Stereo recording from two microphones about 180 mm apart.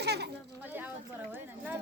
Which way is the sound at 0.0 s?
65° right (ahead or behind).